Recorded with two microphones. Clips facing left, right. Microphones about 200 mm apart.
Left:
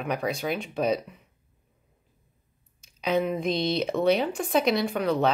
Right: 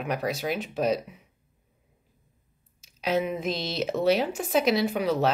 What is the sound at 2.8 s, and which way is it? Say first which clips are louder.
Speech: left 1 dB; 5° right (ahead or behind).